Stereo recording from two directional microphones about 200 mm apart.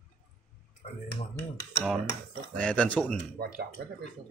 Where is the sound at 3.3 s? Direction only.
50° right (ahead or behind).